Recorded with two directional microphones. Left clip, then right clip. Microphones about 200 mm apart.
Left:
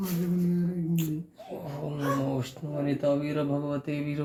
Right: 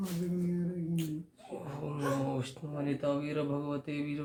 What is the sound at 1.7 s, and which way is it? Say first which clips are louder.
Speech: left 4 dB; 10° right (ahead or behind).